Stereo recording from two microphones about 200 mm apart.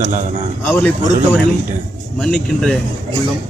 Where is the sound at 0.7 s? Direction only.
5° left (ahead or behind).